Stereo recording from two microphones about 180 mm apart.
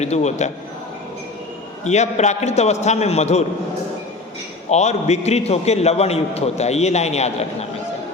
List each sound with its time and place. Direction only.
0.0 s a man's voice: 40° left (ahead or behind)
1.8 s a man's voice: 40° left (ahead or behind)
4.7 s a man's voice: 40° left (ahead or behind)